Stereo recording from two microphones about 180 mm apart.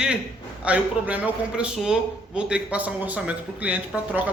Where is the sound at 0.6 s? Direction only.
5° right (ahead or behind).